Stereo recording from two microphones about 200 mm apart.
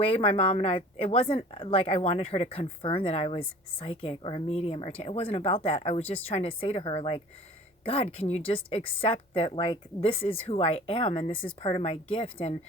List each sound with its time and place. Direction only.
0.0 s a woman's voice: 30° left (ahead or behind)